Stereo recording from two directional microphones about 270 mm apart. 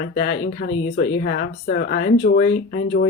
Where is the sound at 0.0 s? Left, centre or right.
Left.